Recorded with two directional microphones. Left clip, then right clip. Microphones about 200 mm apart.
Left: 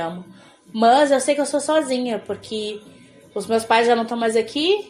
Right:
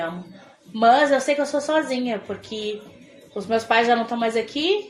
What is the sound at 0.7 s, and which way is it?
A woman's voice, 50° left (ahead or behind).